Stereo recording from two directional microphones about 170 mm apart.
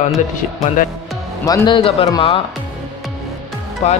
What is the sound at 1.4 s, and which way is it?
Speech, 20° left (ahead or behind).